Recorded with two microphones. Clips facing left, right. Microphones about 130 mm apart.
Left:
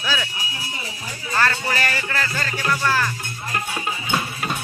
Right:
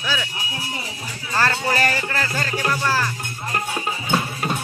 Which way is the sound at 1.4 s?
30° right (ahead or behind).